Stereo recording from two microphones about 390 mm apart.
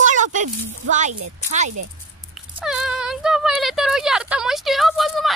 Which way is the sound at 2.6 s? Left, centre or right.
Centre.